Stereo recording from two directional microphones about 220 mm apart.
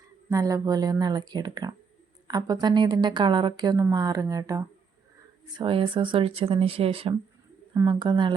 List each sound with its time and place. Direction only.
0.3 s a woman's voice: 15° right (ahead or behind)